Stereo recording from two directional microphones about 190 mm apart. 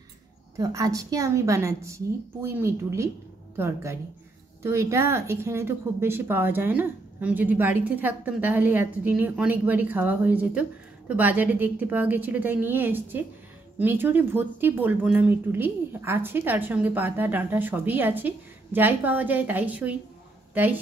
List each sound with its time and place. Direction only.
0.6 s speech: 20° right (ahead or behind)